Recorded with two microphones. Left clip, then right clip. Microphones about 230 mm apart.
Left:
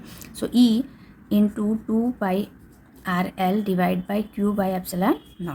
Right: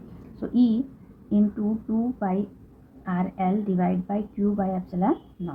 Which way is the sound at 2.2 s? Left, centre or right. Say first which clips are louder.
Left 3 dB; left.